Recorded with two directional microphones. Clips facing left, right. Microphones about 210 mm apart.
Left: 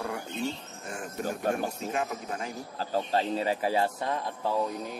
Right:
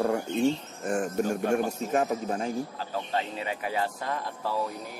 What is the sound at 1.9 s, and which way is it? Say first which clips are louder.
Speech: right 6 dB; 35° right (ahead or behind).